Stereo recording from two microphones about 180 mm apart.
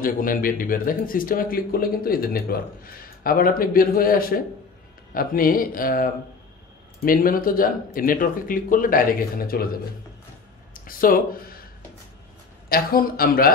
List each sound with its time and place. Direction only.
0.0 s speech: 50° left (ahead or behind)
12.6 s speech: 55° left (ahead or behind)